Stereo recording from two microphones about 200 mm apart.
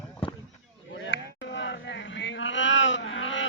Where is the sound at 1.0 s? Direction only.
60° left (ahead or behind).